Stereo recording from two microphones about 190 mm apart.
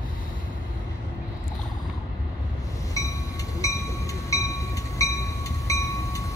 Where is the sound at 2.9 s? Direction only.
15° left (ahead or behind).